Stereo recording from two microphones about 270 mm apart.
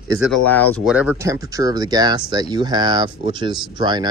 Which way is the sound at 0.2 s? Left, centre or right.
Centre.